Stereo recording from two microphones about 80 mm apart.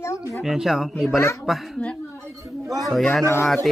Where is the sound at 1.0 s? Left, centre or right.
Left.